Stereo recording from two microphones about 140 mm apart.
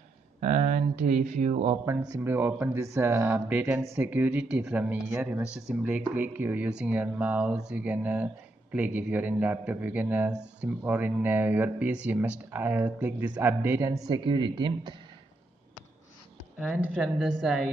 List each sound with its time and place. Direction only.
0.4 s speech: 65° right (ahead or behind)
1.9 s speech: 15° right (ahead or behind); by 15.0 s 35° right (ahead or behind)
16.5 s a woman's voice: 5° right (ahead or behind)